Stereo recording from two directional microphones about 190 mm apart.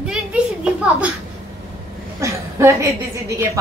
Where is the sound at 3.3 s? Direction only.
15° right (ahead or behind).